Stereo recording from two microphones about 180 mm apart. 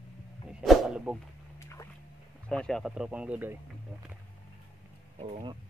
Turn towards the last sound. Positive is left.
turn(degrees=-30)  # may be behind; listen again after turning